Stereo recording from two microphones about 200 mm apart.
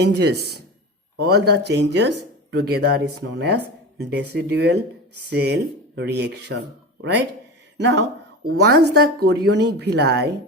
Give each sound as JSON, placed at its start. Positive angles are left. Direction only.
{"t": 0.0, "sound": "speech", "side_deg": -55}
{"t": 7.8, "sound": "speech", "side_deg": -60}